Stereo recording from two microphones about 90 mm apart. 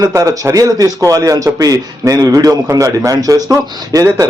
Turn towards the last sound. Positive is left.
turn(degrees=-35)  # may be behind; listen again after turning